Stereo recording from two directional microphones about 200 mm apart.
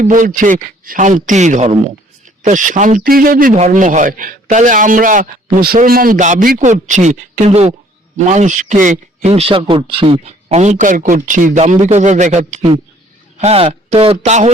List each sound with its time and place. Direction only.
0.0 s a man's voice: 40° right (ahead or behind)